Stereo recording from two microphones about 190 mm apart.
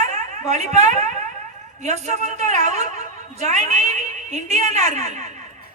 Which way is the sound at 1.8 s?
35° right (ahead or behind).